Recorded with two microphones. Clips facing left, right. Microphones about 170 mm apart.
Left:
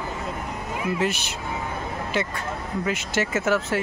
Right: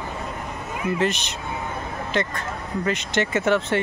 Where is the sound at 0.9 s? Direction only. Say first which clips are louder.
Right 2 dB; 10° left (ahead or behind).